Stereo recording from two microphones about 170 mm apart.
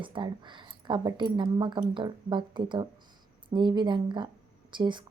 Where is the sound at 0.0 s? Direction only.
30° right (ahead or behind).